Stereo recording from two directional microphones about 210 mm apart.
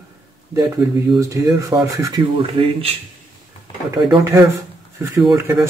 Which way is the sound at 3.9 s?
15° right (ahead or behind).